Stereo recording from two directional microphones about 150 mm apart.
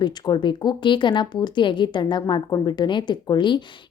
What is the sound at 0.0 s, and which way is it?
A woman's voice, 30° left (ahead or behind).